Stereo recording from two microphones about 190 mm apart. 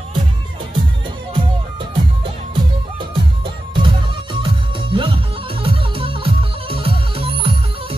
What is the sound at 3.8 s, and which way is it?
Music, 25° right (ahead or behind).